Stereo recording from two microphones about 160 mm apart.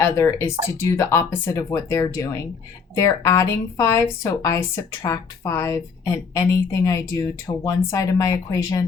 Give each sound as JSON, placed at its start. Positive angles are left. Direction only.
{"t": 0.0, "sound": "a woman's voice", "side_deg": 15}